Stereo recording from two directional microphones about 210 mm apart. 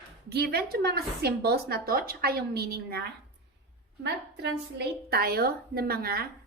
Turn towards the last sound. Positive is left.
turn(degrees=-45)  # may be behind; listen again after turning